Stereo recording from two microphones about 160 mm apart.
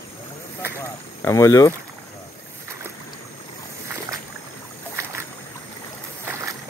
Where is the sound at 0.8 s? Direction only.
20° left (ahead or behind).